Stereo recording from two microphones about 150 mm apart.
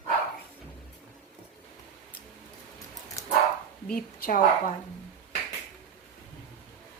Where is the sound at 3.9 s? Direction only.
70° left (ahead or behind).